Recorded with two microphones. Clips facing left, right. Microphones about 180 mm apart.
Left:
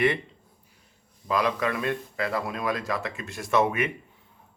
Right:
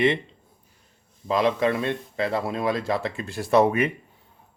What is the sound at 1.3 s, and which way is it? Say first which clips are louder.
Speech: right 4 dB; 25° right (ahead or behind).